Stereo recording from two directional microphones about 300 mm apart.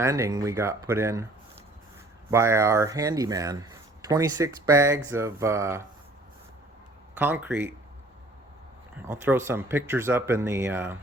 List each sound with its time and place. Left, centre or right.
0.0 s speech: centre
2.3 s speech: centre
7.2 s speech: centre
9.0 s speech: centre